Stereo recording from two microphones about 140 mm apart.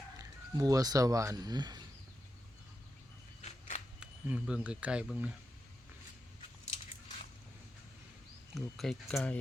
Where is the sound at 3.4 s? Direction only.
60° left (ahead or behind).